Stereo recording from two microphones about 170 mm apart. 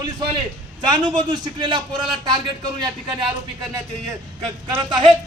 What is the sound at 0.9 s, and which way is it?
A man's voice, 25° right (ahead or behind).